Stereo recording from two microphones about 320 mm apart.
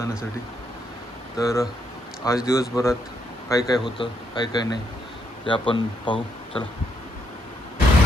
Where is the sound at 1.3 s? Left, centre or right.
Centre.